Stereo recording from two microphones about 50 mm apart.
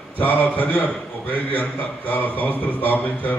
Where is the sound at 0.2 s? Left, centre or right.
Left.